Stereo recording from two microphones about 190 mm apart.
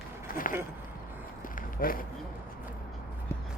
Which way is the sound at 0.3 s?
50° left (ahead or behind).